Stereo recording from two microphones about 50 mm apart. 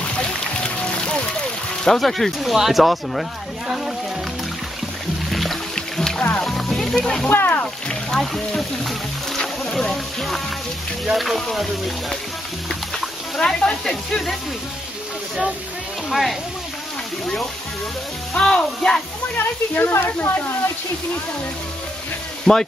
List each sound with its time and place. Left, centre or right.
1.9 s speech: centre
5.3 s music: centre
5.8 s music: centre
7.2 s speech: left
7.6 s speech: centre
9.4 s music: centre
11.1 s speech: centre
13.4 s speech: centre
16.1 s speech: centre
18.3 s speech: centre
19.3 s speech: left
22.5 s speech: centre